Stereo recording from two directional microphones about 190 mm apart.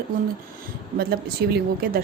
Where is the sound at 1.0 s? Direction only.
55° right (ahead or behind).